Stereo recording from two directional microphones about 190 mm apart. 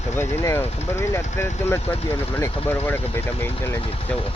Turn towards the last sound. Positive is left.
turn(degrees=15)  # may be behind; listen again after turning